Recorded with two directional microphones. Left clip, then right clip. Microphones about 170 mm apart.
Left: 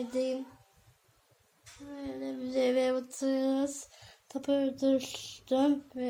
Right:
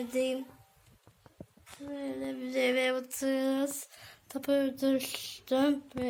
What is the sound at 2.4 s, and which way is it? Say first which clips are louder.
Music: left 2 dB; 10° left (ahead or behind).